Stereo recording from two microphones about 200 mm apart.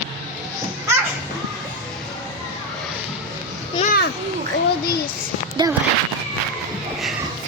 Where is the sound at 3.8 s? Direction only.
45° left (ahead or behind).